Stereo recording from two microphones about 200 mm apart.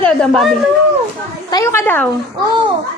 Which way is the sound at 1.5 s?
15° left (ahead or behind).